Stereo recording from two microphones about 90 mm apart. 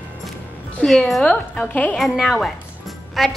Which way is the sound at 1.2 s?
10° left (ahead or behind).